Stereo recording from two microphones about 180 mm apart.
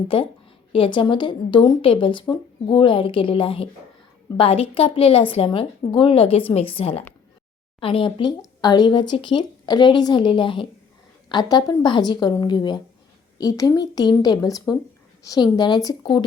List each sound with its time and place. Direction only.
0.7 s speech: 30° left (ahead or behind)